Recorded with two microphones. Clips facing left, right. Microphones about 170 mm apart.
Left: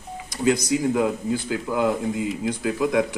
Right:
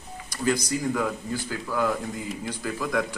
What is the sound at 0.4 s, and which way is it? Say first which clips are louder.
Speech: left 5 dB; 20° left (ahead or behind).